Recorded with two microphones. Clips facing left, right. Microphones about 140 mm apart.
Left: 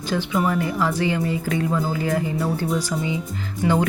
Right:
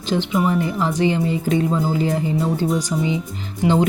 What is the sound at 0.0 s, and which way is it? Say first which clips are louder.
Speech: right 2 dB; 20° right (ahead or behind).